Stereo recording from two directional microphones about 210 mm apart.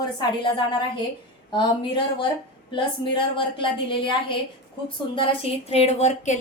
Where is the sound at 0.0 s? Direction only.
20° left (ahead or behind).